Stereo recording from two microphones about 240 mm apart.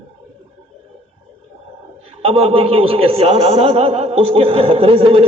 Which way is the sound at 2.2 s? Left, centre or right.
Right.